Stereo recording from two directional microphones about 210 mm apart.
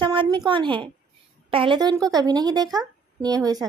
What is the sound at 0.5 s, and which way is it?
A woman's voice, 25° right (ahead or behind).